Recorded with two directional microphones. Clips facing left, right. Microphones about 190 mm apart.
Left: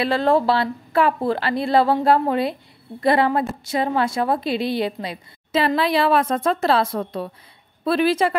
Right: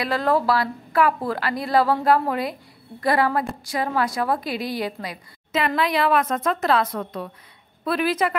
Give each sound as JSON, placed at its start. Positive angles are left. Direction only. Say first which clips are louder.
{"t": 0.0, "sound": "a woman's voice", "louder": "left 3 dB", "side_deg": 25}